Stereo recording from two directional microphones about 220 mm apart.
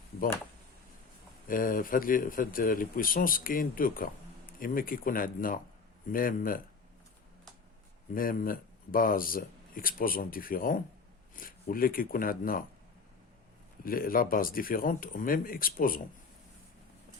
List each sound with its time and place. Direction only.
1.5 s speech: 40° left (ahead or behind)
8.1 s speech: 40° left (ahead or behind)
13.8 s speech: 40° left (ahead or behind)